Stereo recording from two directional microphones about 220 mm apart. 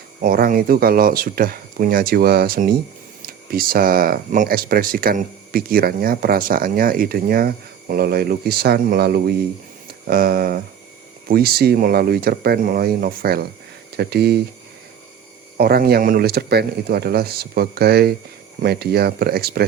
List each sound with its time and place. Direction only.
0.2 s speech: 40° right (ahead or behind)
15.5 s speech: 45° right (ahead or behind)